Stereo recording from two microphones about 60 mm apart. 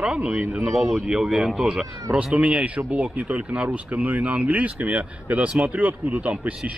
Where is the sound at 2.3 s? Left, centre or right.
Right.